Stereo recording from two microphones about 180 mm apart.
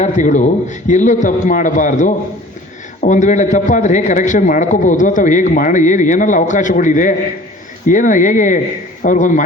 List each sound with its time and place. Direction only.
0.0 s a man's voice: 45° left (ahead or behind)